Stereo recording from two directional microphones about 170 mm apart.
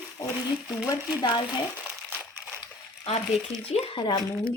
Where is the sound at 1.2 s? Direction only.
25° left (ahead or behind).